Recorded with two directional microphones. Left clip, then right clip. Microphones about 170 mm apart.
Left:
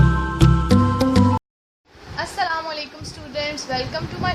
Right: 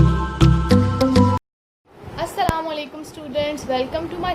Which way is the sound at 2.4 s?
40° right (ahead or behind).